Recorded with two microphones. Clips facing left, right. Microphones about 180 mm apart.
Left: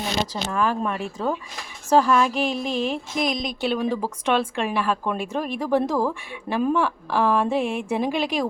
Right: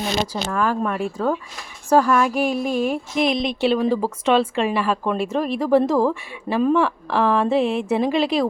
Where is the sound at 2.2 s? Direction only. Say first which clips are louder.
Right 3 dB; 10° right (ahead or behind).